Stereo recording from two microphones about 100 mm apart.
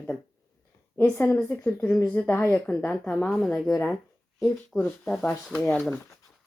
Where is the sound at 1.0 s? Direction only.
20° left (ahead or behind); by 3.7 s 5° left (ahead or behind).